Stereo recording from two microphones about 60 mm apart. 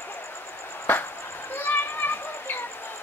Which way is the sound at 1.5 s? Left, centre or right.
Left.